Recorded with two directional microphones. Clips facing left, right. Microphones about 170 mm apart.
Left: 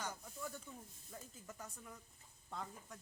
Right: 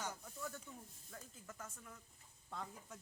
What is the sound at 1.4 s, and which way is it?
Speech, 20° left (ahead or behind).